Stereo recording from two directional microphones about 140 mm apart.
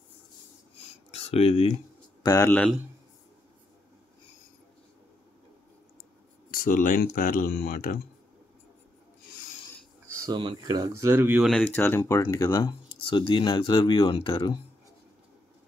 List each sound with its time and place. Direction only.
1.1 s speech: 45° left (ahead or behind)
2.4 s speech: 10° left (ahead or behind)
6.5 s speech: 85° left
10.0 s a sound: 20° right (ahead or behind)
10.3 s speech: 35° right (ahead or behind); by 11.4 s 15° right (ahead or behind)
11.6 s speech: 15° left (ahead or behind); by 14.5 s 35° left (ahead or behind)